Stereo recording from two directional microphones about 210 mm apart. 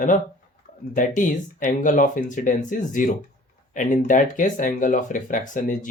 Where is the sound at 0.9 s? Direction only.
40° left (ahead or behind).